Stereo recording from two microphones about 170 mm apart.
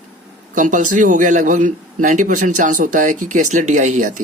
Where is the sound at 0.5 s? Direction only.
50° right (ahead or behind).